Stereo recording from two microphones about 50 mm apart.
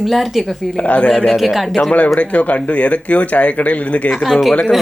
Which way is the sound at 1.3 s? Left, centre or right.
Centre.